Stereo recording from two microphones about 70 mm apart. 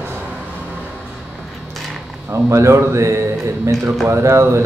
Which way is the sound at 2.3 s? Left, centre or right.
Right.